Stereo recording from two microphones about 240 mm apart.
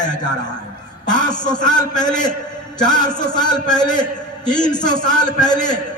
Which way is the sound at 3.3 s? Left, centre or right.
Centre.